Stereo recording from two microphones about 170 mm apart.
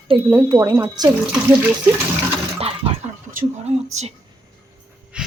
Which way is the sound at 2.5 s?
35° right (ahead or behind).